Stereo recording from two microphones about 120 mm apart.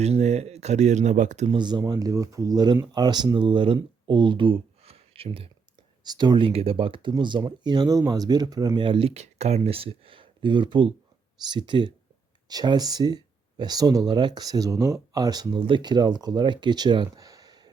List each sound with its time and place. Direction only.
0.0 s speech: 65° right (ahead or behind); by 1.5 s 85° right
1.5 s speech: 40° right (ahead or behind)
6.1 s speech: 35° right (ahead or behind)
6.5 s speech: 55° right (ahead or behind); by 17.7 s 35° right (ahead or behind)